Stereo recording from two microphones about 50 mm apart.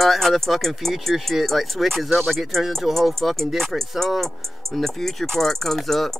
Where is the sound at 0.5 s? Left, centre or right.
Centre.